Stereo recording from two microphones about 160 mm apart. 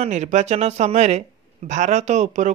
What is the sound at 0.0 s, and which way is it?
Speech, 45° right (ahead or behind).